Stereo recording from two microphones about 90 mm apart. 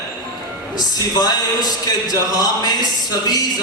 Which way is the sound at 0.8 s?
45° left (ahead or behind).